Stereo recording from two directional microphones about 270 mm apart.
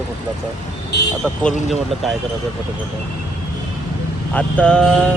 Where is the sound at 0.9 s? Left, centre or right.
Left.